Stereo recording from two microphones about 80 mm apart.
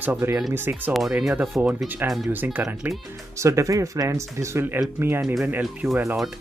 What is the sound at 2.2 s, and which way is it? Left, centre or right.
Speech, right.